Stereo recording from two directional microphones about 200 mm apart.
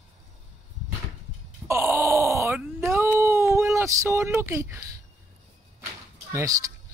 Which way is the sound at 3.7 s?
15° right (ahead or behind).